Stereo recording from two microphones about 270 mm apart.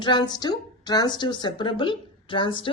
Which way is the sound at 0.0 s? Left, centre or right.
Centre.